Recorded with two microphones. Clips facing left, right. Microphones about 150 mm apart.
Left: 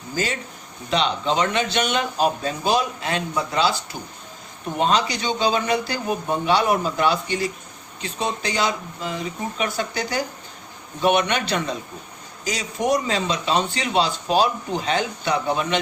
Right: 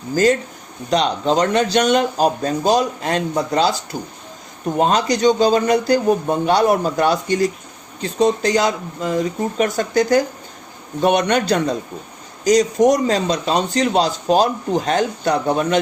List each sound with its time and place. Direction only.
0.9 s speech: 40° right (ahead or behind)
4.8 s speech: 45° right (ahead or behind)